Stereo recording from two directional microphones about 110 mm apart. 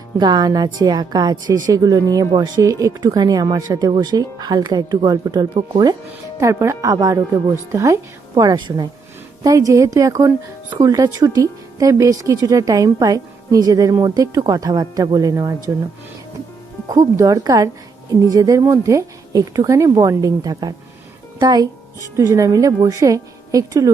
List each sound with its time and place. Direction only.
0.2 s a woman's voice: 40° right (ahead or behind)
6.4 s a woman's voice: 25° right (ahead or behind)
8.4 s a woman's voice: 40° right (ahead or behind)
9.4 s a woman's voice: 30° right (ahead or behind)
16.9 s a woman's voice: 30° right (ahead or behind)